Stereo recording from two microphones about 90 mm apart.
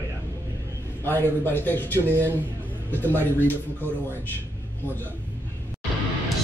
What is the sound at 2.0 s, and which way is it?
Speech, 25° right (ahead or behind).